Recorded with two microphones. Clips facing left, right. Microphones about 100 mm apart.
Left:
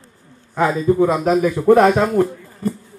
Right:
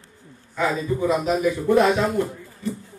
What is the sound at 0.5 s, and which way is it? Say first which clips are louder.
Speech: left 8 dB; 50° left (ahead or behind).